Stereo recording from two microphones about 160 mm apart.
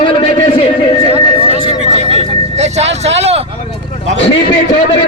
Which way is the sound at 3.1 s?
40° right (ahead or behind).